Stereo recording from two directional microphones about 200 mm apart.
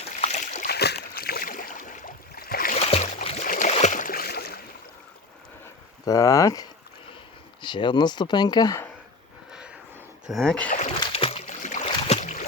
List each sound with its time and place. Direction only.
0.2 s boat: 35° left (ahead or behind)
2.7 s boat: 30° left (ahead or behind); by 4.6 s 50° left (ahead or behind)
6.1 s speech: 15° left (ahead or behind)
9.5 s vehicle: 5° right (ahead or behind)
10.2 s speech: centre (ahead or behind)
10.7 s a sound: 35° left (ahead or behind)
11.0 s boat: 30° left (ahead or behind)